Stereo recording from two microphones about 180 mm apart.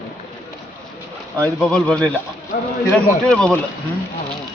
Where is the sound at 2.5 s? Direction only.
60° left (ahead or behind).